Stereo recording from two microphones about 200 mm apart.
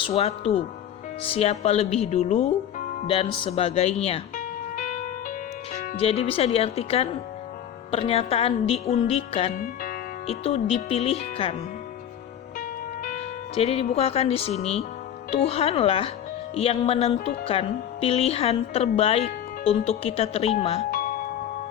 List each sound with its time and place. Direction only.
0.0 s speech: 30° left (ahead or behind)
12.5 s music: 40° left (ahead or behind)
13.6 s speech: 30° left (ahead or behind)
20.9 s music: 45° left (ahead or behind)